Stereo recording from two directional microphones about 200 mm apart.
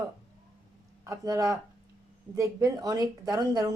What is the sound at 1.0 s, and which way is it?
A woman's voice, 15° right (ahead or behind).